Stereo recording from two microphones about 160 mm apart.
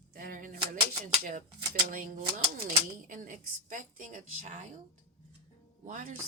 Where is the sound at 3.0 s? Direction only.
55° right (ahead or behind).